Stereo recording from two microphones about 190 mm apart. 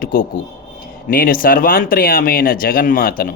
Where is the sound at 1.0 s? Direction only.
50° left (ahead or behind).